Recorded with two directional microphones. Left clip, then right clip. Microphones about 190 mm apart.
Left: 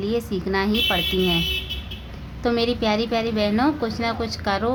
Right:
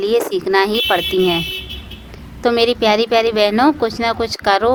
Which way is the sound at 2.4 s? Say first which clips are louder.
Right 8 dB; 45° right (ahead or behind).